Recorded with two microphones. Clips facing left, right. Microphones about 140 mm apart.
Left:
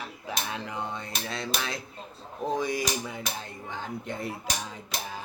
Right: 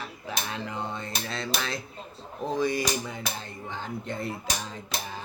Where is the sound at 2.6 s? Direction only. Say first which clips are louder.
Right 6 dB; 10° left (ahead or behind).